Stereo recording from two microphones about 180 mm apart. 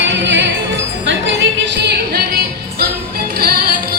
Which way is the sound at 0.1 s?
80° right.